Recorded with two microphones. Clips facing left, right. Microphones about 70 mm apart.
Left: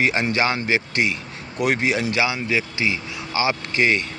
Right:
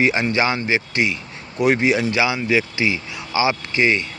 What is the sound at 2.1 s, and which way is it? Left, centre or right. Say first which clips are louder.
Speech: right 3 dB; centre.